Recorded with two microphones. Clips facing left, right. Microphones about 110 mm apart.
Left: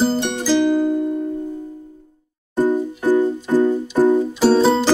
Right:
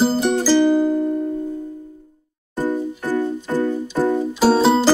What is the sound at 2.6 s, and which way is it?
Music, 15° left (ahead or behind).